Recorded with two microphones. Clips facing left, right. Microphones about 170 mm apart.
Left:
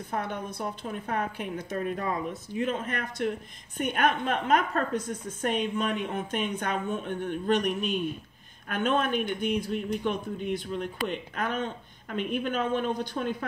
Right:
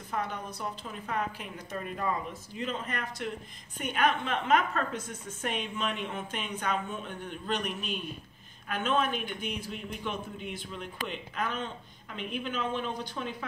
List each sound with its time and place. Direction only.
0.1 s speech: 55° left (ahead or behind)